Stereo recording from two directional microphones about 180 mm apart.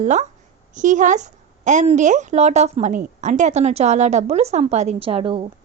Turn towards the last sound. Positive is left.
turn(degrees=-30)  # may be behind; listen again after turning